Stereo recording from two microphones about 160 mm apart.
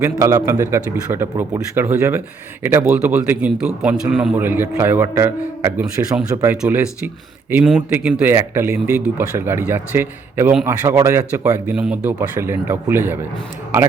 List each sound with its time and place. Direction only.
0.0 s a man's voice: 20° right (ahead or behind)